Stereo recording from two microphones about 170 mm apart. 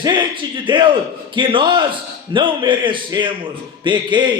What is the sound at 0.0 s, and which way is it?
A man's voice, 25° right (ahead or behind).